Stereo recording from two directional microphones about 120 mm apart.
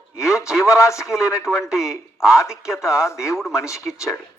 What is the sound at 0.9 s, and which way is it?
Speech, 5° right (ahead or behind).